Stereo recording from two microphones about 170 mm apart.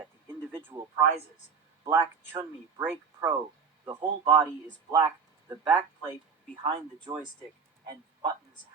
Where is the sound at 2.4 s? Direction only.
10° right (ahead or behind).